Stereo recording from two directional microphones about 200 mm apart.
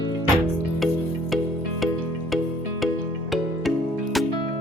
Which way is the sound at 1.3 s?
Centre (ahead or behind).